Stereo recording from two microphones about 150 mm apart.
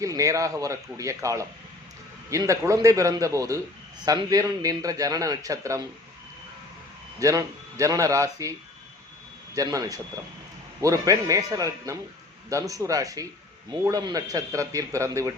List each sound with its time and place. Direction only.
0.0 s a man's voice: 20° right (ahead or behind)
7.2 s a man's voice: 20° right (ahead or behind)
9.6 s a man's voice: 25° right (ahead or behind)